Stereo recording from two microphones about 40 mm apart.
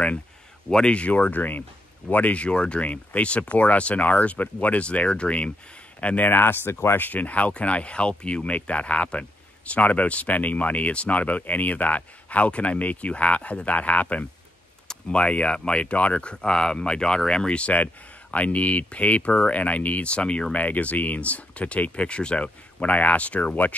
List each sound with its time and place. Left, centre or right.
0.7 s speech: left
6.2 s speech: left
7.0 s speech: left
20.5 s speech: left